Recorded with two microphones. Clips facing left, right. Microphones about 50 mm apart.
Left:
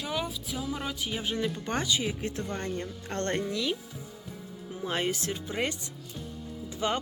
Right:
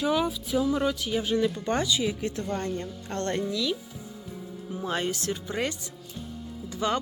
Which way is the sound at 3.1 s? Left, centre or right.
Left.